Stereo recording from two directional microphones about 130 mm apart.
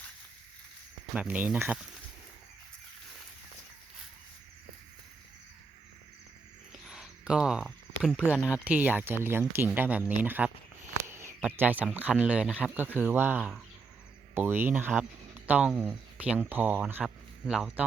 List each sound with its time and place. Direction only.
1.1 s speech: 10° right (ahead or behind)
6.8 s a sound: 5° right (ahead or behind)
8.2 s speech: 10° right (ahead or behind)
17.0 s speech: 5° right (ahead or behind)